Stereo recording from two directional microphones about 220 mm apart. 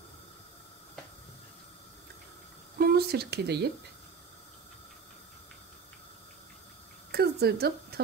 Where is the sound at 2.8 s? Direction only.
45° right (ahead or behind).